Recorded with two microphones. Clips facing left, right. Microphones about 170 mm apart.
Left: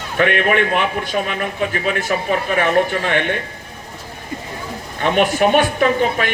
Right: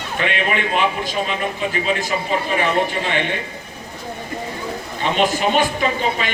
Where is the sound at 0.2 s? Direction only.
55° left (ahead or behind).